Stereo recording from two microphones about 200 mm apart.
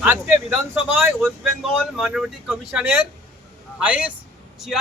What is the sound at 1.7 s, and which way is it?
A man's voice, centre (ahead or behind).